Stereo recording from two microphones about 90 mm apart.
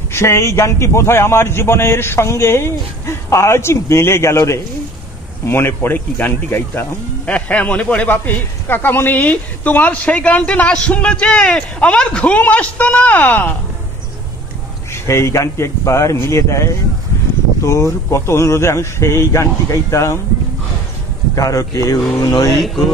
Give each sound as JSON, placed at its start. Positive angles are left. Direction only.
{"t": 0.1, "sound": "a man's voice", "side_deg": 30}
{"t": 14.9, "sound": "speech", "side_deg": 30}
{"t": 21.4, "sound": "speech", "side_deg": 40}
{"t": 22.2, "sound": "mantra", "side_deg": 40}